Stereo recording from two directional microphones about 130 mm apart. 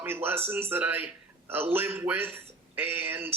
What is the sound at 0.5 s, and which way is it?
Speech, 15° right (ahead or behind).